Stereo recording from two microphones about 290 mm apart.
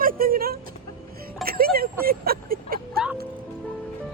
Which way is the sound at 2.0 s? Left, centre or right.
Right.